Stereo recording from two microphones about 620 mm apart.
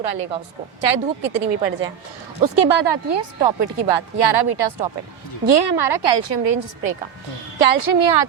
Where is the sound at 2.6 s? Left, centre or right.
Right.